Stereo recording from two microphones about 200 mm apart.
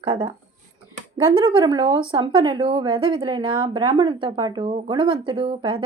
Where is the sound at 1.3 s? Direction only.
25° right (ahead or behind).